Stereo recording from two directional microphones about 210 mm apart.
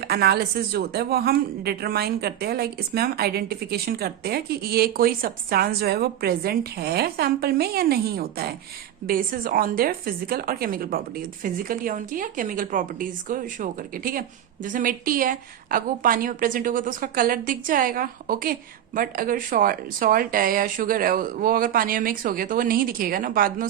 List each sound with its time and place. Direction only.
0.0 s a woman's voice: 50° right (ahead or behind)